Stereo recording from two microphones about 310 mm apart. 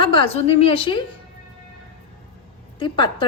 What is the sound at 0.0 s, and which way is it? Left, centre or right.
A woman's voice, centre.